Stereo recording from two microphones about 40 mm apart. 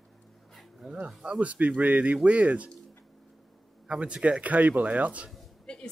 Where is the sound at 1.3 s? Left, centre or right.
Right.